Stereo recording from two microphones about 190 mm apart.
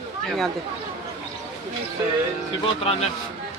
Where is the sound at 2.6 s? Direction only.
30° left (ahead or behind).